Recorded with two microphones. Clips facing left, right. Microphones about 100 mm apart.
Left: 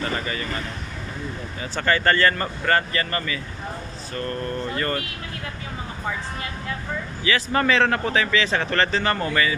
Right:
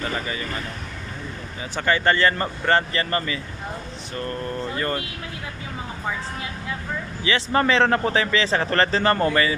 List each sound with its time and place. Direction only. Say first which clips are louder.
1.6 s speech: even; 15° right (ahead or behind)
4.7 s speech: even; 20° right (ahead or behind)
7.2 s speech: right 1 dB; 25° right (ahead or behind)